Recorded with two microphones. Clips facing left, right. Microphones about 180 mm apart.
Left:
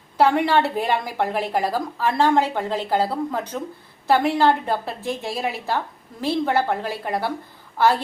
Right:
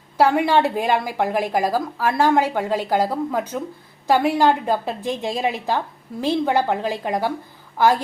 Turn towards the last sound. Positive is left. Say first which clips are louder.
# right 1 dB
turn(degrees=-10)  # may be behind; listen again after turning